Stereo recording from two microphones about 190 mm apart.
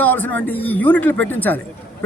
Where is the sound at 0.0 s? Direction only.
10° left (ahead or behind).